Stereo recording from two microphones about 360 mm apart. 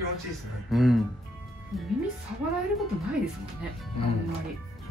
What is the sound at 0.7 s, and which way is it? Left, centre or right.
Speech, centre.